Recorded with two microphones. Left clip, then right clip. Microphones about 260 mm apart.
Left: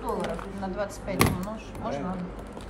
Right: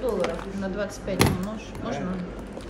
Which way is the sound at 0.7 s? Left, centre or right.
Left.